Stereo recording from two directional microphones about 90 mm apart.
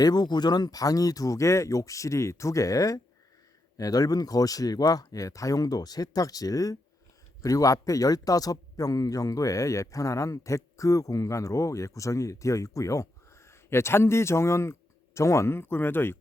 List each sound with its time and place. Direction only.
0.0 s speech: 50° left (ahead or behind); by 16.1 s 25° left (ahead or behind)